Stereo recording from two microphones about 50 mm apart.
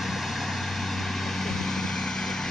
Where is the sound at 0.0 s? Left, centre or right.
Centre.